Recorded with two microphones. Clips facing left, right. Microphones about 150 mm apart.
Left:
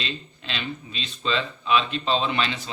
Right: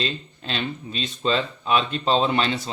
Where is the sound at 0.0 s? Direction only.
40° right (ahead or behind).